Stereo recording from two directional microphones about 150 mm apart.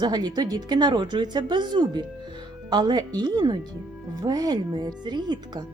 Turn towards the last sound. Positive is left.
turn(degrees=-30)  # may be behind; listen again after turning